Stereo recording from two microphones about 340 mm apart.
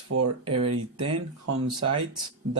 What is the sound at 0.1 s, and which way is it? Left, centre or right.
Speech, right.